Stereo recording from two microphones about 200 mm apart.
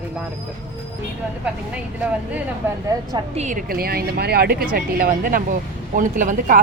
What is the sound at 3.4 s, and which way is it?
Speech, 40° right (ahead or behind).